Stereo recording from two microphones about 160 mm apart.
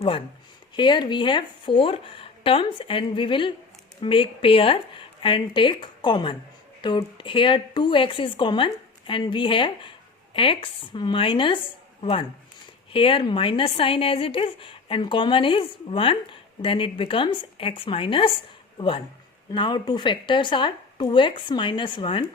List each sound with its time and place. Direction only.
0.8 s a woman's voice: 30° left (ahead or behind)
12.9 s a woman's voice: 35° left (ahead or behind)